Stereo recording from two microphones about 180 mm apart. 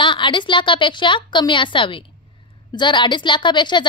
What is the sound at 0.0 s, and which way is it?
A woman's voice, 25° left (ahead or behind).